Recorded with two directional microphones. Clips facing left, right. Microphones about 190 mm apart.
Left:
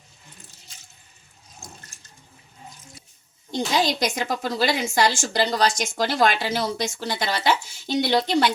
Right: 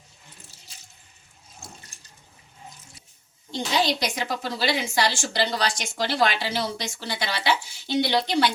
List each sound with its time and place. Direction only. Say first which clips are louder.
3.5 s a woman's voice: left 2 dB; 45° left (ahead or behind)